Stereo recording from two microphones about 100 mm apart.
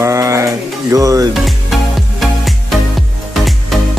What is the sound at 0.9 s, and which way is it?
Speech, 35° right (ahead or behind).